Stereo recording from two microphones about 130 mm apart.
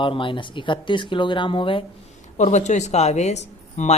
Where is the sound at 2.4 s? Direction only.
60° left (ahead or behind).